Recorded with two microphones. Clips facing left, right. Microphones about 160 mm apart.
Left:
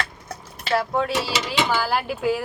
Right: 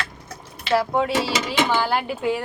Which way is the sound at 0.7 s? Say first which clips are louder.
Right 2 dB; centre (ahead or behind).